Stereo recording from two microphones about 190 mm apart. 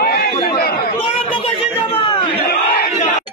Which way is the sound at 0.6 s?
55° left (ahead or behind).